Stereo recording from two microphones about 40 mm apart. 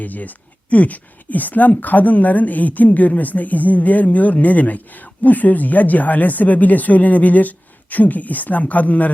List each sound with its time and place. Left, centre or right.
0.0 s speech: left